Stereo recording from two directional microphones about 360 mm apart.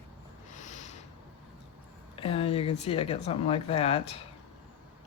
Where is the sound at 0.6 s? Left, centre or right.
Centre.